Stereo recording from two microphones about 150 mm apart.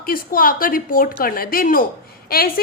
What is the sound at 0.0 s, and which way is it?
A woman's voice, 70° left (ahead or behind).